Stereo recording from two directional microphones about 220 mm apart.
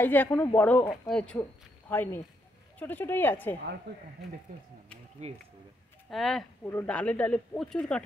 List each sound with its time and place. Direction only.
0.0 s a woman's voice: 10° left (ahead or behind)
5.2 s speech: 30° right (ahead or behind)
6.0 s speech: centre (ahead or behind)